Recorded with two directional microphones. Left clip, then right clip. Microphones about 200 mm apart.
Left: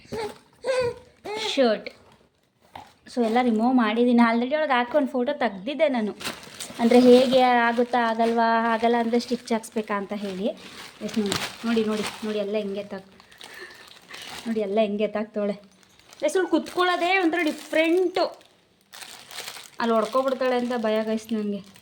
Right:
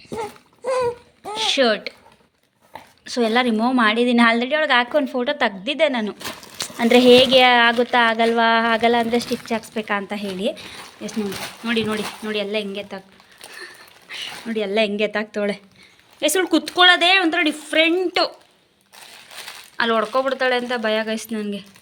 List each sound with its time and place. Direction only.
0.2 s a sound: 45° right (ahead or behind)
1.4 s a sound: centre (ahead or behind)
3.0 s a woman's voice: 10° right (ahead or behind)
9.2 s a woman's voice: 10° left (ahead or behind)
11.6 s speech: 10° right (ahead or behind)
14.4 s speech: 10° right (ahead or behind)
19.7 s a woman's voice: 5° right (ahead or behind)